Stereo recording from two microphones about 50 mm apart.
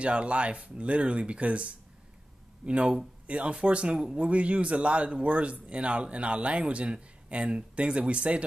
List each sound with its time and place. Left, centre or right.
0.0 s a man's voice: right